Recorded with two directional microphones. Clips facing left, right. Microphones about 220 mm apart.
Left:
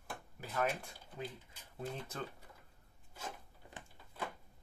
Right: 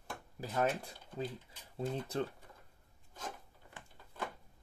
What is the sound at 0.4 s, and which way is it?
Speech, 30° right (ahead or behind).